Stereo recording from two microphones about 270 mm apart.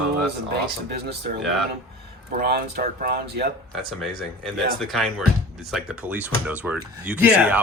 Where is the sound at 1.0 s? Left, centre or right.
Right.